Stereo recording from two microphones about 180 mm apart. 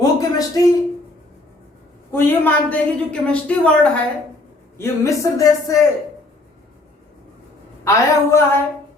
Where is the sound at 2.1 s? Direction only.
10° left (ahead or behind).